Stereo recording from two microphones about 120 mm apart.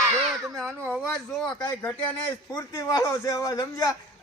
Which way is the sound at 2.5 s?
30° left (ahead or behind).